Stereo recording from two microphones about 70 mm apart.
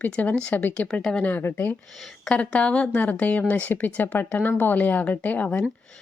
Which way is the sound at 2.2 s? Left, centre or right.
Centre.